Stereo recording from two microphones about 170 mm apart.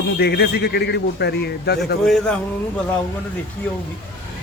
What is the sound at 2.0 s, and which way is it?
Speech, centre (ahead or behind).